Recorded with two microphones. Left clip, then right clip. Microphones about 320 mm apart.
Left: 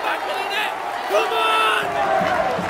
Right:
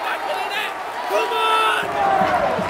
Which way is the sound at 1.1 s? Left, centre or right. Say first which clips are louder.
Even; centre.